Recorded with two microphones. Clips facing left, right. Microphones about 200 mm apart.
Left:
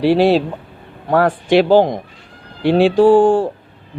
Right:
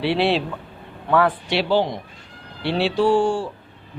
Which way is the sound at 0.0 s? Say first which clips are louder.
Left 8 dB; 45° left (ahead or behind).